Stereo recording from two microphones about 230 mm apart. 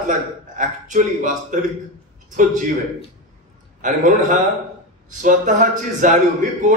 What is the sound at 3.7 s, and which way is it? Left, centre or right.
A man's voice, right.